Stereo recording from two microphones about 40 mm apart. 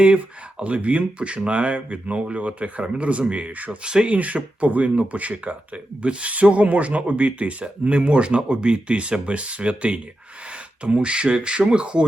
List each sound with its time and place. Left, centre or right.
0.0 s speech: right
3.8 s speech: right
4.1 s speech: right